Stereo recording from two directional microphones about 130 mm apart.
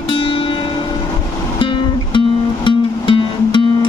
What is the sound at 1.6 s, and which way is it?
Music, 40° left (ahead or behind).